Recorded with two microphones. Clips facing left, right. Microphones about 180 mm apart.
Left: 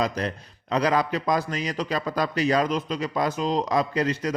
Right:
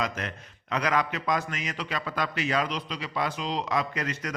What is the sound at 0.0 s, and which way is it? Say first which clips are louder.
A man's voice: left 6 dB; 35° left (ahead or behind).